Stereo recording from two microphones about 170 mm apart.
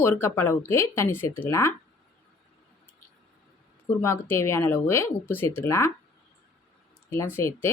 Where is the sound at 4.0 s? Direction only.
15° left (ahead or behind).